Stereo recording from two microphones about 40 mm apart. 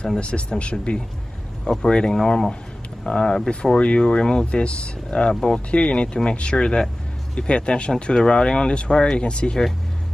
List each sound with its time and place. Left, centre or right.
0.2 s speech: left
1.6 s speech: centre
2.1 s speech: centre
3.7 s speech: left
5.3 s speech: centre
5.7 s speech: left
7.9 s speech: centre
8.3 s speech: left